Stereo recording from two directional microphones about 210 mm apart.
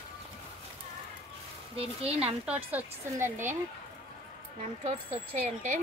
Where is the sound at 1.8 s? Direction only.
30° right (ahead or behind).